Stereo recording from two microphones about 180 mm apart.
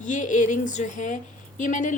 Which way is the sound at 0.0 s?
45° left (ahead or behind).